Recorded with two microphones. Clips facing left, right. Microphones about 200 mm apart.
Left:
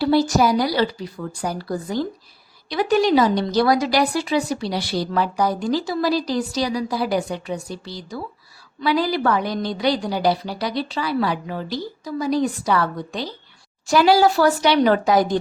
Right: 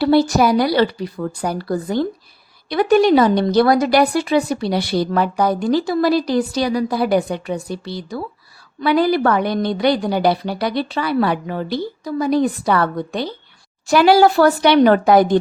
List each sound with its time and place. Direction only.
0.0 s speech: 60° right (ahead or behind)